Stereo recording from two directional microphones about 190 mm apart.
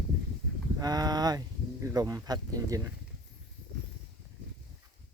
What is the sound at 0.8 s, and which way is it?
Speech, 20° right (ahead or behind).